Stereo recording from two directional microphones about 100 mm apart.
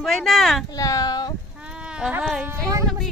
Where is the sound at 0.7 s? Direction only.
35° left (ahead or behind).